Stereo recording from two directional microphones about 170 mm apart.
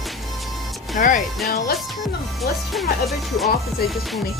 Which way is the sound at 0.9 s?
50° left (ahead or behind).